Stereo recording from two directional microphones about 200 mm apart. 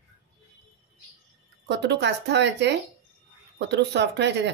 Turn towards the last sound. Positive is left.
turn(degrees=-60)  # may be behind; listen again after turning